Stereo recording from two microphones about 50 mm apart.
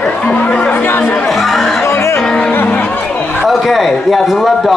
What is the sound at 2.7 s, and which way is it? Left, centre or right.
Chatter, left.